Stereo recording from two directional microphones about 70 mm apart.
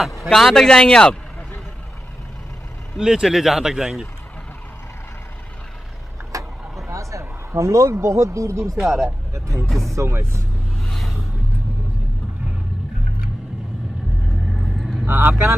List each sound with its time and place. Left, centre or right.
0.3 s speech: centre
3.0 s speech: centre
6.3 s vehicle: right
6.9 s speech: right
8.7 s speech: centre
9.8 s speech: right
10.8 s a sound: centre
14.7 s vehicle: centre
15.0 s speech: right